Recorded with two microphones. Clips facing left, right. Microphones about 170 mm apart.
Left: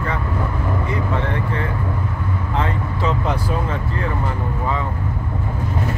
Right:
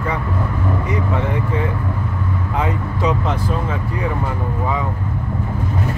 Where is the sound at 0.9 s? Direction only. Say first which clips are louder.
Right 2 dB; 15° right (ahead or behind).